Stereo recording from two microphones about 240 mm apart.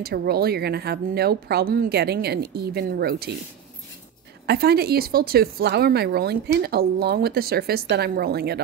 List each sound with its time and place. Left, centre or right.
0.0 s a woman's voice: right
4.5 s a woman's voice: right